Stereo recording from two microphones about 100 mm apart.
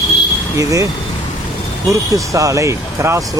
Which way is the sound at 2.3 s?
35° right (ahead or behind).